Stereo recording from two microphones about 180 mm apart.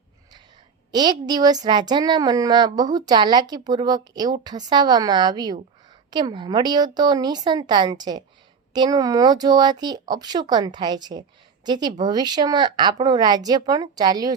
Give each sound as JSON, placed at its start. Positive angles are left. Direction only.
{"t": 0.9, "sound": "a woman's voice", "side_deg": -25}